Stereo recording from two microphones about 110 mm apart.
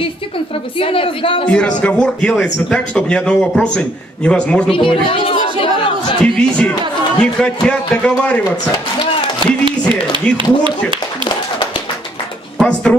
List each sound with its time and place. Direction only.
0.7 s a woman's voice: 55° left (ahead or behind)
1.8 s a man's voice: 10° left (ahead or behind)
4.6 s a sound: 55° left (ahead or behind)
6.2 s a man's voice: 5° left (ahead or behind)
9.7 s speech: 50° right (ahead or behind)
12.5 s speech: 5° left (ahead or behind)